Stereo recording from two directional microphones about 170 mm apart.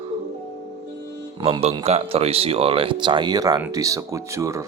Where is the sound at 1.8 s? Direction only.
35° right (ahead or behind); by 4.6 s 15° right (ahead or behind).